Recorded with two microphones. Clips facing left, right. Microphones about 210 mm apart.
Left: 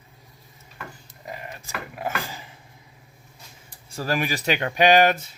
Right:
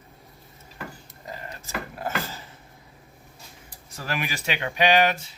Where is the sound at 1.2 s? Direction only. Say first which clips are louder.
Left 2 dB; 20° left (ahead or behind).